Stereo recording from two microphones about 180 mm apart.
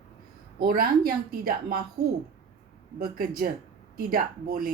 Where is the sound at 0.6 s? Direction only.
55° right (ahead or behind).